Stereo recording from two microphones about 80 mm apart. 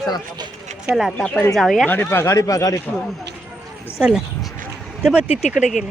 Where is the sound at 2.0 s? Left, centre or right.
Left.